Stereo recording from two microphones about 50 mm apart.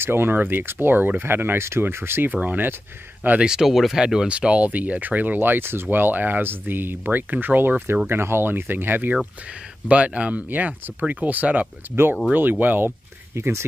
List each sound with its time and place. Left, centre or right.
0.0 s speech: right
2.4 s speech: right
3.3 s speech: centre
4.3 s speech: right
8.1 s speech: right
9.8 s speech: right
11.9 s speech: right
12.4 s speech: right
13.3 s speech: right